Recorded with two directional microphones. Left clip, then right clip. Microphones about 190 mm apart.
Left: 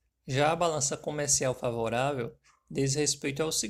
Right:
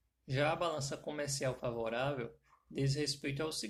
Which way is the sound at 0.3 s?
45° left (ahead or behind).